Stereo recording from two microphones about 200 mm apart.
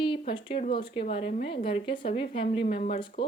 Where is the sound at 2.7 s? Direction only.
40° left (ahead or behind).